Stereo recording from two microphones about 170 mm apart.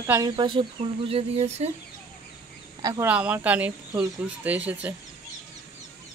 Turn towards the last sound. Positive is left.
turn(degrees=-10)  # may be behind; listen again after turning